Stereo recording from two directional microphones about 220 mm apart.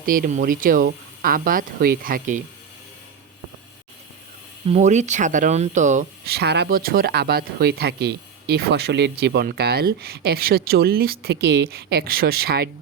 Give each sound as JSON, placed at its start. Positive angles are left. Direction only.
{"t": 0.0, "sound": "speech", "side_deg": -40}
{"t": 4.6, "sound": "speech", "side_deg": -30}